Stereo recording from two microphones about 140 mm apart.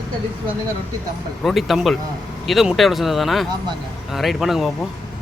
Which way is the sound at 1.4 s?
Centre (ahead or behind).